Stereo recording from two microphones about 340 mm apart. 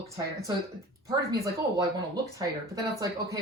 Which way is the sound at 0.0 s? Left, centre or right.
Right.